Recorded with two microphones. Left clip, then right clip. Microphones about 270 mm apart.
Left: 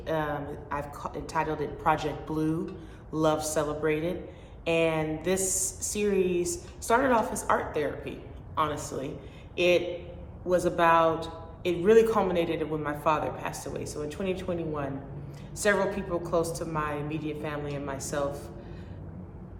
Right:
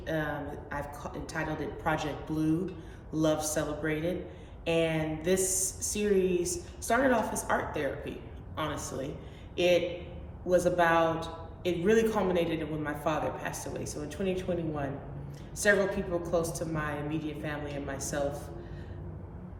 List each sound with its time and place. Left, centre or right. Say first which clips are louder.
0.0 s a woman's voice: left 3 dB; centre